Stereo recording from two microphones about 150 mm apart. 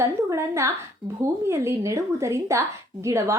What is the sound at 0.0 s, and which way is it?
A woman's voice, 20° right (ahead or behind).